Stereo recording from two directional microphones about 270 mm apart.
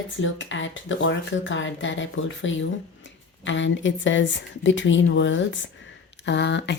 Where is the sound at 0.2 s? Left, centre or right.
Left.